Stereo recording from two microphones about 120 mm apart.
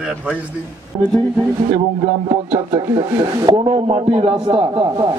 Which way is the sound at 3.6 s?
45° right (ahead or behind).